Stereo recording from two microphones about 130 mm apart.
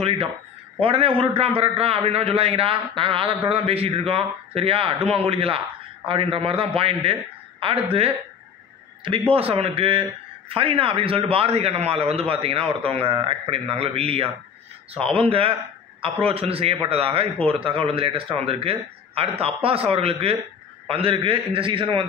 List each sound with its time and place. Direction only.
0.7 s a man's voice: 45° right (ahead or behind)
9.3 s a man's voice: 50° right (ahead or behind)